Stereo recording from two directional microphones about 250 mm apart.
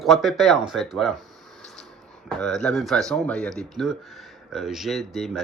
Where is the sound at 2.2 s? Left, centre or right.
Centre.